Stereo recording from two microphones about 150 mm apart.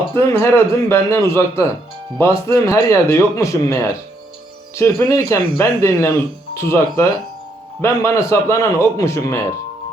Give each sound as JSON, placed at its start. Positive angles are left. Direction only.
{"t": 0.5, "sound": "a man's voice", "side_deg": 20}